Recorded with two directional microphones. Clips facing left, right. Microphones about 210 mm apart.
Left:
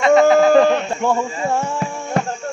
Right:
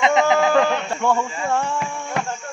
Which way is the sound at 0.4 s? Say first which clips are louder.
Left 6 dB; 35° left (ahead or behind).